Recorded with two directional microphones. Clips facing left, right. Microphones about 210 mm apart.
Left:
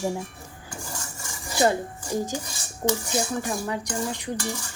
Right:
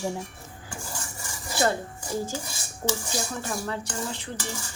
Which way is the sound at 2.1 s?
15° left (ahead or behind).